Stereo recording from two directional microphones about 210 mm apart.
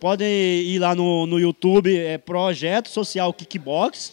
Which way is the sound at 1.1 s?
35° left (ahead or behind).